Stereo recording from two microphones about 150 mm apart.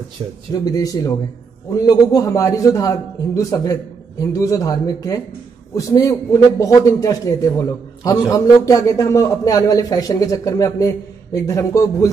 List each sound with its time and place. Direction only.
0.2 s speech: 25° right (ahead or behind)
0.7 s a man's voice: 25° left (ahead or behind)